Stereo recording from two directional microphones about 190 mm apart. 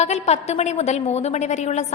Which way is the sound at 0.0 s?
35° left (ahead or behind).